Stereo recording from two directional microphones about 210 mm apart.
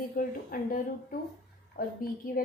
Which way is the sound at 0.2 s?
40° left (ahead or behind).